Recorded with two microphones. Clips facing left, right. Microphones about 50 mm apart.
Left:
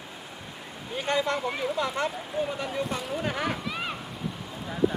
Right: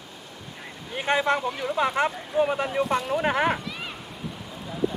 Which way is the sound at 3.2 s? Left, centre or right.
Right.